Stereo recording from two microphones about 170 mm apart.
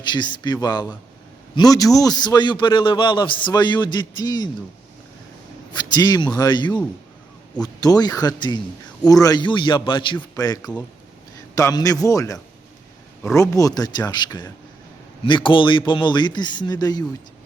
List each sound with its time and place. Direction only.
0.0 s a man's voice: 25° left (ahead or behind)
5.9 s a man's voice: 25° left (ahead or behind)